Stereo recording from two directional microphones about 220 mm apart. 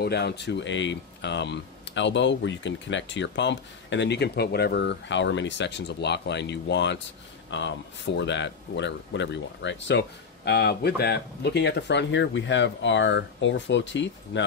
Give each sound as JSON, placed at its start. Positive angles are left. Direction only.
{"t": 0.0, "sound": "speech", "side_deg": 50}